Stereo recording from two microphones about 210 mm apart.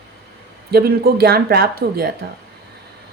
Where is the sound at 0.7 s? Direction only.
50° right (ahead or behind).